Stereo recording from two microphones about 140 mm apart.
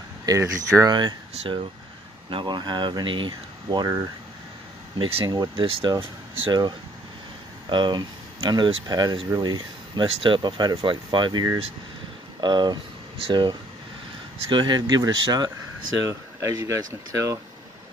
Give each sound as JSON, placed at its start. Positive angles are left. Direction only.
{"t": 0.2, "sound": "speech", "side_deg": -25}
{"t": 2.2, "sound": "speech", "side_deg": -35}
{"t": 5.7, "sound": "speech", "side_deg": -40}
{"t": 7.7, "sound": "speech", "side_deg": -35}